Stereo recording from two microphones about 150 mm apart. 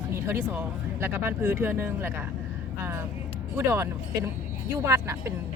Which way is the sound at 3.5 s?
15° right (ahead or behind).